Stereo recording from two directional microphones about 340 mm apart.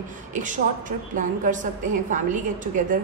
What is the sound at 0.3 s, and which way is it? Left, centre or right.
A woman's voice, right.